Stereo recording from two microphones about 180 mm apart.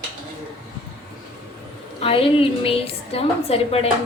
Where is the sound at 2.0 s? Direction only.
30° left (ahead or behind).